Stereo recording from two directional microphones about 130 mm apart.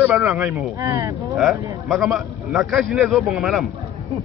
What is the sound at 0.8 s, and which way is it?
Speech, 30° right (ahead or behind).